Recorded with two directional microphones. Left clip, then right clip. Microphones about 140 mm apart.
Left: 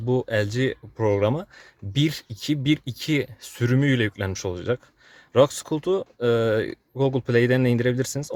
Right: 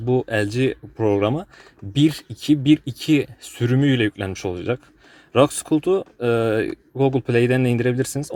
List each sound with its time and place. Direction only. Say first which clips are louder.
0.0 s speech: right 3 dB; 25° left (ahead or behind)